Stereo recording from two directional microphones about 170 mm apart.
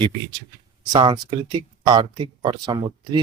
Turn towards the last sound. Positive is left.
turn(degrees=-25)  # may be behind; listen again after turning